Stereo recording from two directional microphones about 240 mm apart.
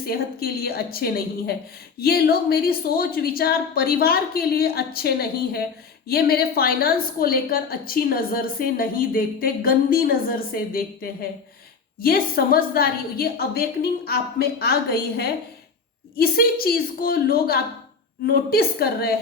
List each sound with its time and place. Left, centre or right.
0.0 s a woman's voice: left